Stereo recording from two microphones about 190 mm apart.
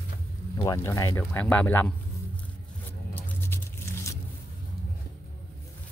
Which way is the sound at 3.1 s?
10° left (ahead or behind).